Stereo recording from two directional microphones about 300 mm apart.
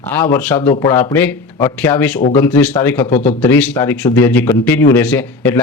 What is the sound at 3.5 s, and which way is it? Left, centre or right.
Speech, centre.